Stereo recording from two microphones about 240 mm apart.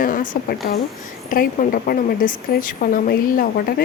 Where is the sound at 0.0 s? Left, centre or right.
Left.